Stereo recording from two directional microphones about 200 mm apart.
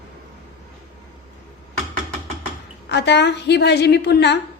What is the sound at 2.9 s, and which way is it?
A woman's voice, 60° left (ahead or behind).